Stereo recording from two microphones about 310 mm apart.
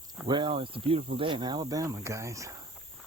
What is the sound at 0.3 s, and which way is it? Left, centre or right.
Speech, centre.